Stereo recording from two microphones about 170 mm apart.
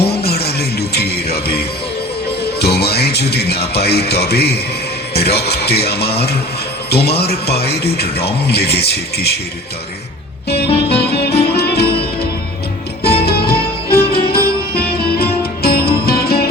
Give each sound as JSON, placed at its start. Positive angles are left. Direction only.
{"t": 0.0, "sound": "music", "side_deg": 70}
{"t": 2.6, "sound": "speech", "side_deg": 70}
{"t": 10.8, "sound": "music", "side_deg": 70}
{"t": 13.0, "sound": "music", "side_deg": 65}